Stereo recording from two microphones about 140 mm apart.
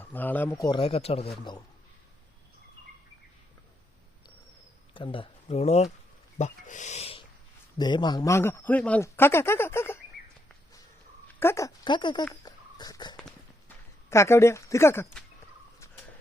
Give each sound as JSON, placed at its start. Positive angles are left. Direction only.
{"t": 0.0, "sound": "speech", "side_deg": 15}
{"t": 0.6, "sound": "speech", "side_deg": 35}
{"t": 4.9, "sound": "speech", "side_deg": 35}
{"t": 6.4, "sound": "speech", "side_deg": 60}
{"t": 7.8, "sound": "speech", "side_deg": 30}
{"t": 11.3, "sound": "speech", "side_deg": 20}
{"t": 11.9, "sound": "speech", "side_deg": 35}
{"t": 12.3, "sound": "a sound", "side_deg": 25}
{"t": 14.1, "sound": "speech", "side_deg": 20}